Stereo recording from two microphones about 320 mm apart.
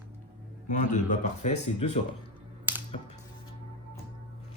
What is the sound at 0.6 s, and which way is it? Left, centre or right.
Speech, left.